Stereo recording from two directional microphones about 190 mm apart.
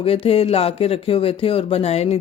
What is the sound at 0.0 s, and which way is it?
Speech, 30° left (ahead or behind).